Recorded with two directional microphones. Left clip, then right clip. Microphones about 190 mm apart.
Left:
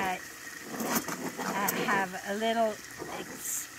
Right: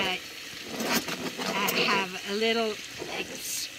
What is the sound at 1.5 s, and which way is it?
Vehicle, 15° left (ahead or behind).